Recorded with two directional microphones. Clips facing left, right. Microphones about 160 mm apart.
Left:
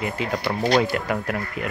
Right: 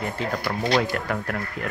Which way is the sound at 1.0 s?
20° left (ahead or behind).